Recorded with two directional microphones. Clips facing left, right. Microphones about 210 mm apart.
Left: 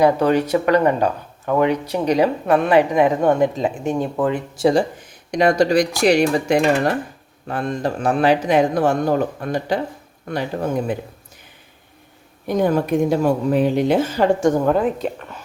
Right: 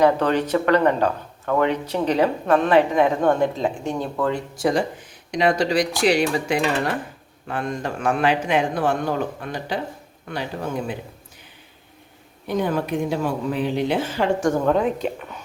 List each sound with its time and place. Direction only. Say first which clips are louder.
0.0 s speech: left 3 dB; 10° left (ahead or behind); by 4.9 s 30° left (ahead or behind)
5.3 s a man's voice: left 4 dB; 45° left (ahead or behind)
12.5 s speech: left 5 dB; 45° left (ahead or behind)
14.6 s speech: left 2 dB; 5° left (ahead or behind)